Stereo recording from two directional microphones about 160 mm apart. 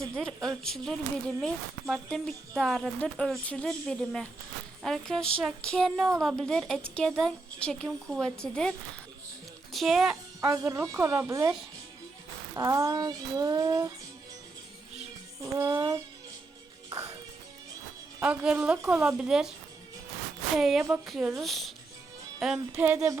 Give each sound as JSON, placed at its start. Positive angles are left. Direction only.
{"t": 0.4, "sound": "speech", "side_deg": 0}
{"t": 9.7, "sound": "speech", "side_deg": 0}
{"t": 10.4, "sound": "a woman's voice", "side_deg": -20}
{"t": 12.5, "sound": "speech", "side_deg": -20}
{"t": 15.4, "sound": "speech", "side_deg": -20}
{"t": 16.9, "sound": "music", "side_deg": -20}
{"t": 18.2, "sound": "a woman's voice", "side_deg": -5}
{"t": 20.6, "sound": "a woman's voice", "side_deg": 0}